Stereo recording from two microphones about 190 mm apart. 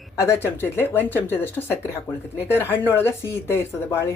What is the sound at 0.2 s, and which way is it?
Speech, 15° left (ahead or behind).